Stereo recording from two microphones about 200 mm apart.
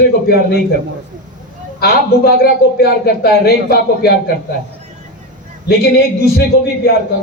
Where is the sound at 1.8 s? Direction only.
50° left (ahead or behind).